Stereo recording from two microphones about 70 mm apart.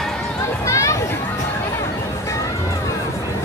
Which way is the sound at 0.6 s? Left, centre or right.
Left.